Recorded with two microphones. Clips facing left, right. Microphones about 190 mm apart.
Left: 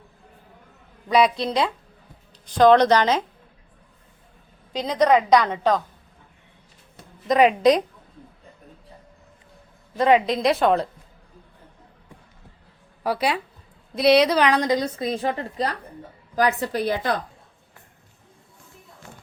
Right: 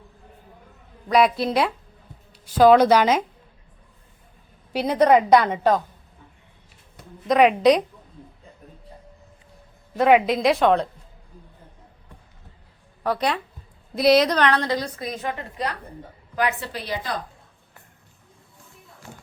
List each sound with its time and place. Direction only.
1.0 s a woman's voice: centre (ahead or behind)
4.7 s speech: 10° right (ahead or behind)
7.3 s a woman's voice: centre (ahead or behind)
10.0 s a woman's voice: 5° right (ahead or behind)
13.0 s a woman's voice: 10° left (ahead or behind); by 17.1 s 50° left (ahead or behind)